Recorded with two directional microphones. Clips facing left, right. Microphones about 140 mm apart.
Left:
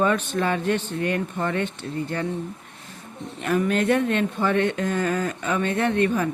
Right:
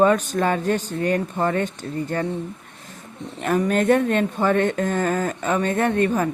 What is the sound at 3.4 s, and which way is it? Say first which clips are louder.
Speech: right 2 dB; 40° right (ahead or behind).